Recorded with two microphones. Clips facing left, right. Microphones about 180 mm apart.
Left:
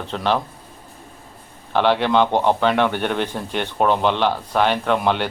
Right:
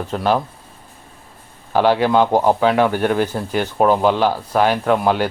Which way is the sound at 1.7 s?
5° right (ahead or behind).